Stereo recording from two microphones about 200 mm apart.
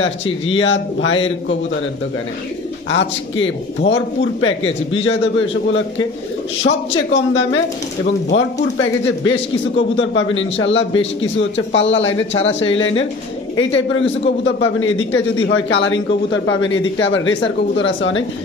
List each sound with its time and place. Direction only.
0.0 s a man's voice: 70° left (ahead or behind)
2.9 s a man's voice: 65° left (ahead or behind)